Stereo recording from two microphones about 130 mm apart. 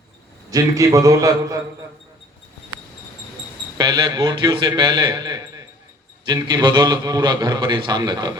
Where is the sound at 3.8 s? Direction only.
35° right (ahead or behind).